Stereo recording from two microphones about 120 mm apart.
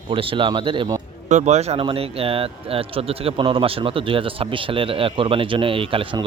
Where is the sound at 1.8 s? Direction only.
50° right (ahead or behind).